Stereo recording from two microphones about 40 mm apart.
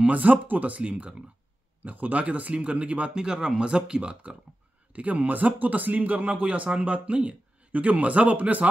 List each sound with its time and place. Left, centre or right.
0.0 s speech: right
3.2 s speech: centre
4.9 s speech: right